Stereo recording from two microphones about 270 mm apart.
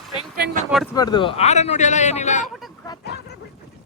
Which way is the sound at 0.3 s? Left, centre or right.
Right.